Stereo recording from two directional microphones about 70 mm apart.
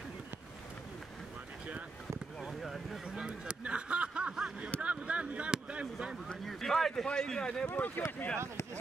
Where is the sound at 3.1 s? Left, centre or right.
Centre.